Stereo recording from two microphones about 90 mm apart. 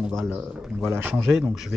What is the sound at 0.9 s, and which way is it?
Speech, 25° right (ahead or behind).